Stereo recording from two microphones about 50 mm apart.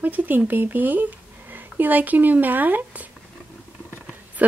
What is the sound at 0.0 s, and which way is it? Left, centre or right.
Speech, right.